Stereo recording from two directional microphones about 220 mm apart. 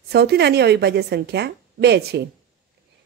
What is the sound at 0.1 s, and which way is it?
A woman's voice, 50° right (ahead or behind).